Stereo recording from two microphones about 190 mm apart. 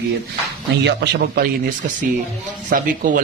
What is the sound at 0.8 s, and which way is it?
A man's voice, 60° right (ahead or behind).